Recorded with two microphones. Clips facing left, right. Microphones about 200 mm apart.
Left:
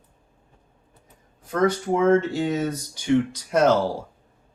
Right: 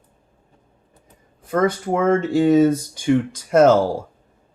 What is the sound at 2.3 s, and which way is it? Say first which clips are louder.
Speech: right 10 dB; 50° right (ahead or behind).